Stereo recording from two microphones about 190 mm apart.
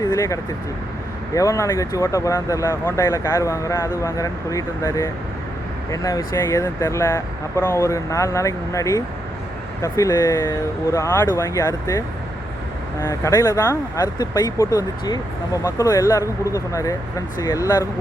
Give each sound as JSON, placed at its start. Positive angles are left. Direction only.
{"t": 0.1, "sound": "speech", "side_deg": 15}